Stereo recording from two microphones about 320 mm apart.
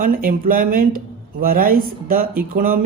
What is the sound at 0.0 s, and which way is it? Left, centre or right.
Speech, right.